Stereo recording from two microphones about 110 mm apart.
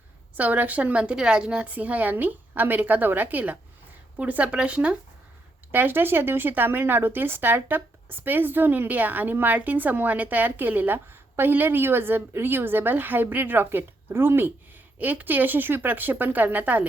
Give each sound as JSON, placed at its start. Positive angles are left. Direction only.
{"t": 0.3, "sound": "a woman's voice", "side_deg": -15}